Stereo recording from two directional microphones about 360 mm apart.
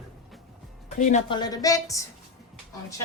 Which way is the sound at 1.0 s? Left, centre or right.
Centre.